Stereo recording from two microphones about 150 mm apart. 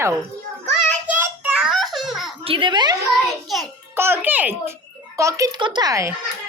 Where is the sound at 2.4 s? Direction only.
35° right (ahead or behind).